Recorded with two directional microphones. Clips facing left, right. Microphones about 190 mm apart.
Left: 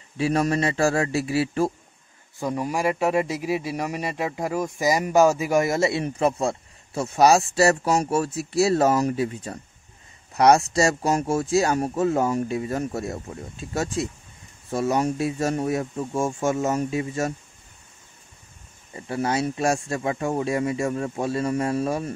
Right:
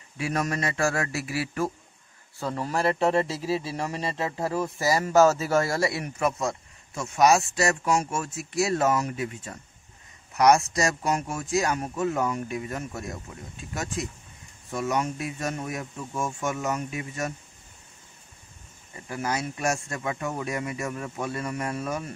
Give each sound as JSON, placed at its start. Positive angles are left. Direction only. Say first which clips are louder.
{"t": 0.2, "sound": "a man's voice", "louder": "left 6 dB", "side_deg": 30}
{"t": 2.3, "sound": "a man's voice", "louder": "left 3 dB", "side_deg": 15}
{"t": 18.9, "sound": "a man's voice", "louder": "left 5 dB", "side_deg": 30}